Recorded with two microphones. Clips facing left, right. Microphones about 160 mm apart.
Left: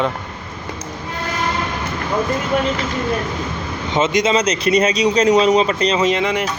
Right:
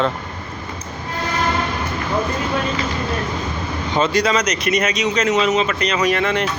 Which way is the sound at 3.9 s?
20° left (ahead or behind).